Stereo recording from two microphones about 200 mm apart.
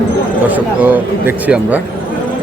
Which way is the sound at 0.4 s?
10° right (ahead or behind).